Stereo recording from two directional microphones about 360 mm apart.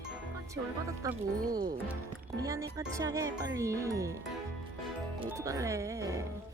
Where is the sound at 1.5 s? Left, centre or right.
Centre.